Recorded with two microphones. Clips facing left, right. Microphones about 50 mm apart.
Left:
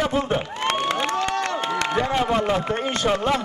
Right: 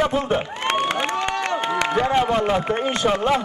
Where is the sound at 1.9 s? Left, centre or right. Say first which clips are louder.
Right 2 dB; centre.